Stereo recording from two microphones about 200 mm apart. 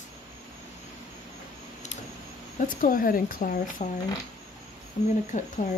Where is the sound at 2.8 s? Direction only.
45° left (ahead or behind).